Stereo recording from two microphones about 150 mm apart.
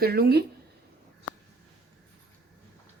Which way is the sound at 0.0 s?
90° right.